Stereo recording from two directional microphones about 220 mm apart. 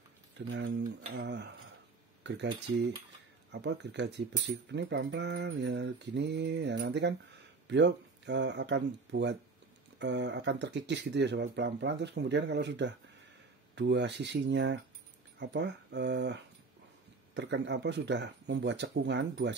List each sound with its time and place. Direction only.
0.5 s mantra: 45° right (ahead or behind)
15.3 s speech: 50° right (ahead or behind)
17.3 s mantra: 50° right (ahead or behind)